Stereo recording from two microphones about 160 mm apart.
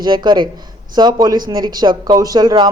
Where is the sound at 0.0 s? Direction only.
25° right (ahead or behind).